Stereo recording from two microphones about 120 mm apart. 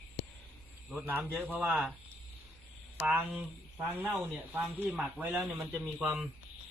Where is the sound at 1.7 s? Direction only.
5° right (ahead or behind).